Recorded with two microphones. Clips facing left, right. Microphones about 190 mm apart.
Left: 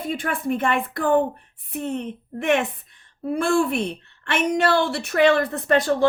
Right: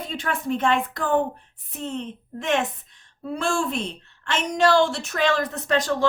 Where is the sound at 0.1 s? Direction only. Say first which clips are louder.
Left 2 dB; 55° left (ahead or behind).